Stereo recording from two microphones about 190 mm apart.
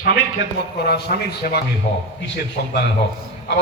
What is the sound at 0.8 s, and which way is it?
A man's voice, 60° left (ahead or behind).